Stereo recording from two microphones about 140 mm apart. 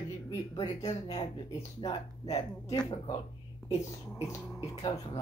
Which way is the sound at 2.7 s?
30° left (ahead or behind).